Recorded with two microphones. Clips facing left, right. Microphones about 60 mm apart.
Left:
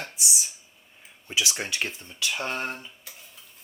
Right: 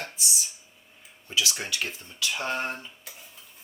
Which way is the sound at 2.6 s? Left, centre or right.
Centre.